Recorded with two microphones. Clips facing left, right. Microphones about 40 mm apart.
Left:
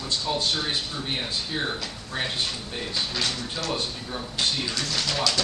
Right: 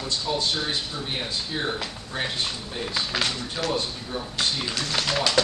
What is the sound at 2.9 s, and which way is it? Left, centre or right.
Speech, right.